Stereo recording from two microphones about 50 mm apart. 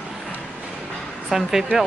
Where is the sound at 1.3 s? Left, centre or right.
Centre.